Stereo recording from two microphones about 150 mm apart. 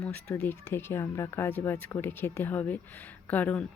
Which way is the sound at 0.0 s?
10° left (ahead or behind).